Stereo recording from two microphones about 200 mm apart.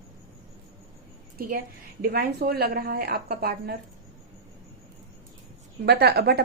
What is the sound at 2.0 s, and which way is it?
A woman's voice, 50° right (ahead or behind).